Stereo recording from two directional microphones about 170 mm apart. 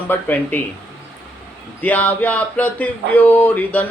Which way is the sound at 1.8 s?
10° left (ahead or behind).